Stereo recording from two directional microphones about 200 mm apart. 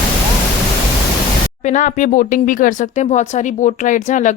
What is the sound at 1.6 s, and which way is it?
Speech, 40° left (ahead or behind).